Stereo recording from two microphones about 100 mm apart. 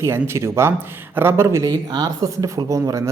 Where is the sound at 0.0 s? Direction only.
25° right (ahead or behind).